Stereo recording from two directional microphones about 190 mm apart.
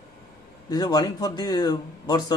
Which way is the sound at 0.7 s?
20° left (ahead or behind).